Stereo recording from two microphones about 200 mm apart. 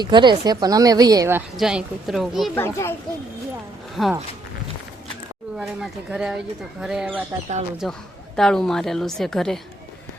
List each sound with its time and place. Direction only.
0.0 s a woman's voice: 20° right (ahead or behind)
1.5 s a woman's voice: centre (ahead or behind)
2.6 s a child's voice: 10° left (ahead or behind)
4.0 s a woman's voice: 5° left (ahead or behind)
5.5 s a woman's voice: centre (ahead or behind)